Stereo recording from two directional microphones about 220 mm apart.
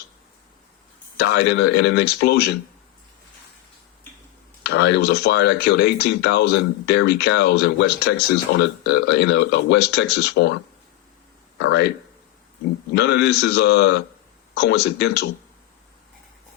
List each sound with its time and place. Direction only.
1.2 s speech: 50° left (ahead or behind)
4.6 s speech: 50° left (ahead or behind)
12.9 s speech: 50° left (ahead or behind)